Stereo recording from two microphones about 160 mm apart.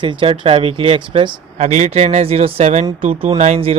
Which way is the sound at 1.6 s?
45° right (ahead or behind).